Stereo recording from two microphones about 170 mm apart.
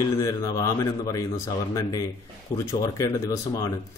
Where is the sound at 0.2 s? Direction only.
20° left (ahead or behind).